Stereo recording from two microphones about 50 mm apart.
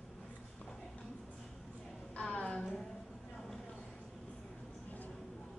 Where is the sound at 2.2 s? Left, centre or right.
Centre.